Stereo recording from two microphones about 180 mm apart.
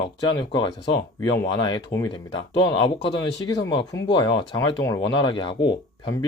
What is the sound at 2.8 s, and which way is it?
Speech, 25° left (ahead or behind).